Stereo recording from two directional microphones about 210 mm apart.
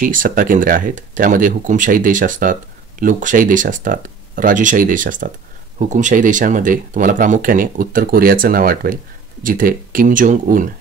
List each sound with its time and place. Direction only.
0.0 s speech: 40° right (ahead or behind)